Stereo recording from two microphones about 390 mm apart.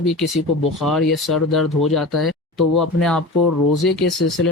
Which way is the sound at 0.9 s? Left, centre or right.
Centre.